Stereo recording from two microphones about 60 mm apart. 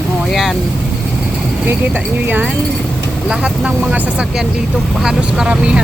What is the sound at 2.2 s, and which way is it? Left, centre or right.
Speech, right.